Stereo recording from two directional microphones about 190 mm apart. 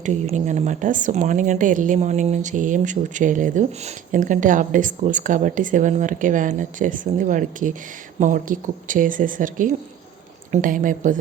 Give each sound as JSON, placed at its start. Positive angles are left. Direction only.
{"t": 0.0, "sound": "speech", "side_deg": -35}